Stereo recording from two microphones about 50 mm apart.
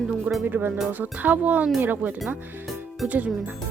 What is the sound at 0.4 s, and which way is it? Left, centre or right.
Speech, right.